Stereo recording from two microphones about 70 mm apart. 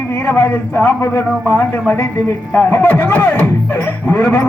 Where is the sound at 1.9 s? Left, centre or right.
Left.